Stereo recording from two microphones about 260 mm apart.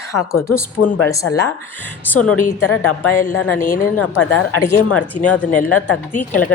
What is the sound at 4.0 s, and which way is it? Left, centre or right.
Speech, left.